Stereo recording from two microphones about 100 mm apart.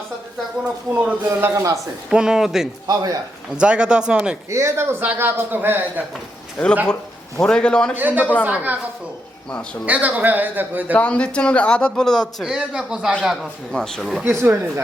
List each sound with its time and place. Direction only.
0.9 s a man's voice: 20° right (ahead or behind)
2.0 s speech: 5° right (ahead or behind)
2.8 s a man's voice: 40° right (ahead or behind)
3.6 s a man's voice: 10° right (ahead or behind)
4.4 s a man's voice: 30° right (ahead or behind)
6.6 s speech: 10° left (ahead or behind)
7.9 s a man's voice: 20° right (ahead or behind)
9.8 s a man's voice: 15° right (ahead or behind)
10.9 s speech: 10° left (ahead or behind)
12.5 s a man's voice: 5° right (ahead or behind)
14.3 s a man's voice: 25° right (ahead or behind)